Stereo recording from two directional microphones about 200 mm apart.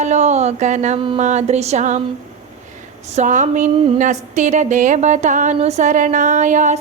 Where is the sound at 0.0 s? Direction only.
35° right (ahead or behind).